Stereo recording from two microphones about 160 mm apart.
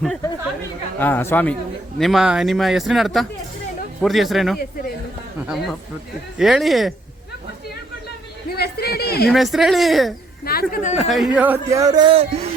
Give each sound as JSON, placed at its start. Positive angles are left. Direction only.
{"t": 0.9, "sound": "speech", "side_deg": 10}
{"t": 2.0, "sound": "speech", "side_deg": 0}
{"t": 6.4, "sound": "speech", "side_deg": 0}
{"t": 8.4, "sound": "speech", "side_deg": 80}
{"t": 9.3, "sound": "speech", "side_deg": 0}
{"t": 10.4, "sound": "speech", "side_deg": 70}
{"t": 11.1, "sound": "a man's voice", "side_deg": -5}